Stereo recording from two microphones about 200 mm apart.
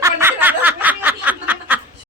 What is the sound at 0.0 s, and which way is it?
Snicker, 10° right (ahead or behind).